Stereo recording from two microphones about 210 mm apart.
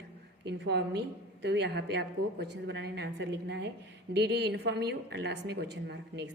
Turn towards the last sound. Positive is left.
turn(degrees=-50)  # may be behind; listen again after turning